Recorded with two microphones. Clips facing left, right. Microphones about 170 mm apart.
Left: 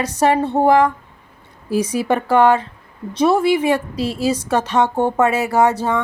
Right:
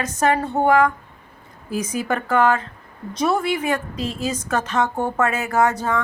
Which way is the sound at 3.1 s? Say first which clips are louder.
Left 6 dB; 30° left (ahead or behind).